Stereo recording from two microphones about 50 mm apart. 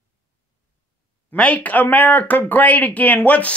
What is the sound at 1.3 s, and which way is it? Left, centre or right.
Speech, left.